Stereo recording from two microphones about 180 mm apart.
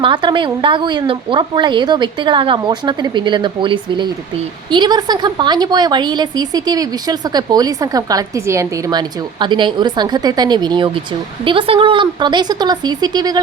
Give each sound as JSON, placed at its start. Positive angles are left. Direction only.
{"t": 0.0, "sound": "a woman's voice", "side_deg": -25}